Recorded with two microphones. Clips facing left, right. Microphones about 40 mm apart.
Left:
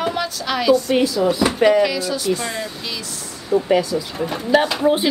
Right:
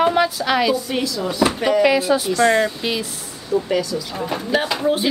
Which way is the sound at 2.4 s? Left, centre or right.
Right.